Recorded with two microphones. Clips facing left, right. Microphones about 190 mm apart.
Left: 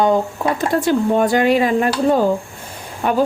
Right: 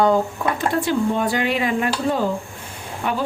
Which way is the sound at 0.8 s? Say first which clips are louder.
Left 6 dB; 45° left (ahead or behind).